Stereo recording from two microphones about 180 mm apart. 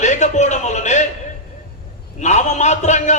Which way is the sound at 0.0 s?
40° left (ahead or behind).